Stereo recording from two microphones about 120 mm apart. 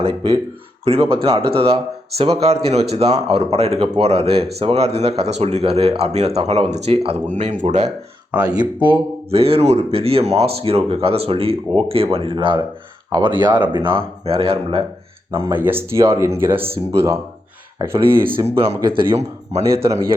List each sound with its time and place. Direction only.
0.0 s speech: 45° right (ahead or behind); by 7.9 s 85° right
8.4 s speech: 35° right (ahead or behind)
9.3 s speech: 55° right (ahead or behind)
15.3 s speech: 25° right (ahead or behind)
18.4 s speech: 55° right (ahead or behind)
19.6 s speech: 25° right (ahead or behind)